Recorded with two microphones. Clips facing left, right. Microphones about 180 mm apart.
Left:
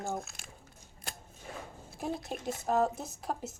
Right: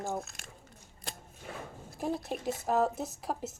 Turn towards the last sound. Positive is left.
turn(degrees=-5)  # may be behind; listen again after turning